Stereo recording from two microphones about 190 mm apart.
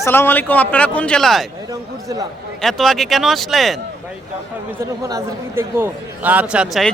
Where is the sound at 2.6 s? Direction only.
Centre (ahead or behind).